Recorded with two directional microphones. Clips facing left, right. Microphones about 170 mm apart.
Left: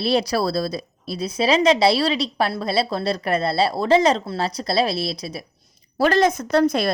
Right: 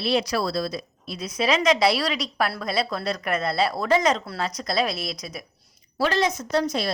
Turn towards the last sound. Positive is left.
turn(degrees=55)  # may be behind; listen again after turning